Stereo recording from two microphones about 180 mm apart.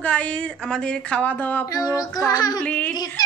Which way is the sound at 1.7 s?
20° left (ahead or behind).